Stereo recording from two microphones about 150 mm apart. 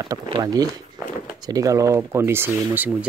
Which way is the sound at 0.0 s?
25° right (ahead or behind).